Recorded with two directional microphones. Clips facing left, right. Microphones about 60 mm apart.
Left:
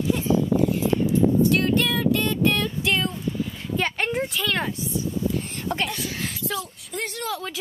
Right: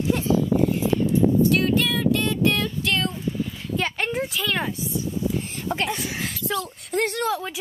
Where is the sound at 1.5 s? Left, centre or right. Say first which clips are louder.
Even; centre.